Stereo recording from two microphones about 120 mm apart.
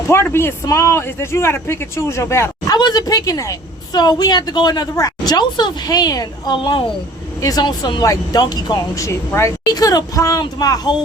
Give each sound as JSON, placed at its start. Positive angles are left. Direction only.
{"t": 0.1, "sound": "speech", "side_deg": 20}
{"t": 2.7, "sound": "a woman's voice", "side_deg": 35}
{"t": 7.4, "sound": "a woman's voice", "side_deg": 35}